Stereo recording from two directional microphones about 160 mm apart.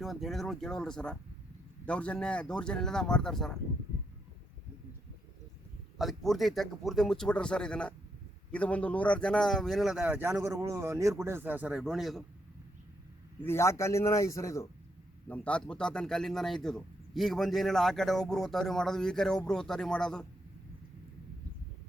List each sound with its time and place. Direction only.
0.0 s speech: centre (ahead or behind)
6.0 s speech: centre (ahead or behind)
10.4 s speech: 20° right (ahead or behind); by 12.2 s centre (ahead or behind)
13.4 s a man's voice: 15° left (ahead or behind)
15.3 s speech: 5° left (ahead or behind)